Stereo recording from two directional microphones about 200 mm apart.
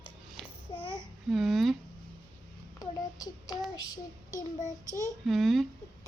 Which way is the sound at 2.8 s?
20° left (ahead or behind).